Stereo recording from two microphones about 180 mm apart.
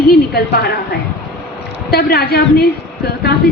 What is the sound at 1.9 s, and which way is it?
Speech, 60° left (ahead or behind).